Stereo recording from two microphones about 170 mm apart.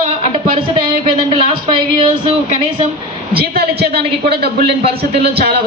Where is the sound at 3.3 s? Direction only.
65° right (ahead or behind).